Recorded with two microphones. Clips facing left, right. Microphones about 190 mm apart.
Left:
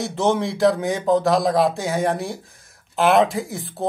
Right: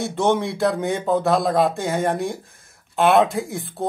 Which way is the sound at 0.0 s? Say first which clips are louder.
Even; centre (ahead or behind).